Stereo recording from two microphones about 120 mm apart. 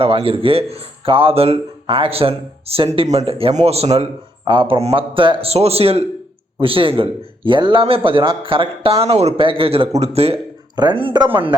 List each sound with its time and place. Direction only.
0.0 s speech: 50° right (ahead or behind)
3.5 s a man's voice: 65° right (ahead or behind)
10.8 s speech: 45° right (ahead or behind)